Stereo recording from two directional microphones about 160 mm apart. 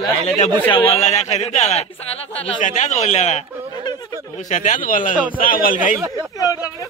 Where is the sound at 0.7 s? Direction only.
30° left (ahead or behind).